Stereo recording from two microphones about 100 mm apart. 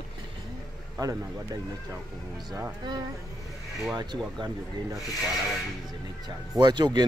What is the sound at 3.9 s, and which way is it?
Speech, 45° right (ahead or behind).